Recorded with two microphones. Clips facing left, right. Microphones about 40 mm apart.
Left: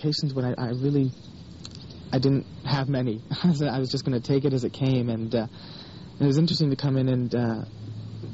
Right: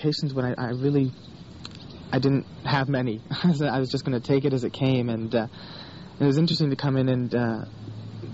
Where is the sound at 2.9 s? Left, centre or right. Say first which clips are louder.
Right 1 dB; centre.